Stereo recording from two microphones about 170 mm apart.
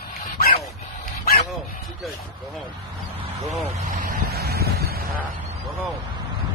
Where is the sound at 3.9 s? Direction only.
55° right (ahead or behind).